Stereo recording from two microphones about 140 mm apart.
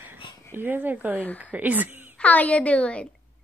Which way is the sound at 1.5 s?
10° right (ahead or behind).